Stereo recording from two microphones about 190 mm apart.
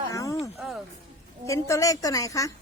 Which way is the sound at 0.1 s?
15° left (ahead or behind).